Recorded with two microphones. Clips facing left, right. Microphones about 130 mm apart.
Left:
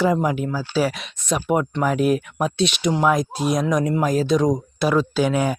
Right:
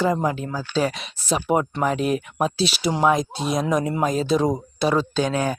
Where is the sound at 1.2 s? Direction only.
Centre (ahead or behind).